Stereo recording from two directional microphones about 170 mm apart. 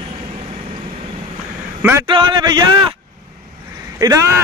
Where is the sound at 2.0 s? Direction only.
30° right (ahead or behind).